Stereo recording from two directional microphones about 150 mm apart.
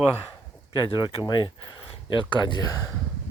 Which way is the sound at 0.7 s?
30° left (ahead or behind).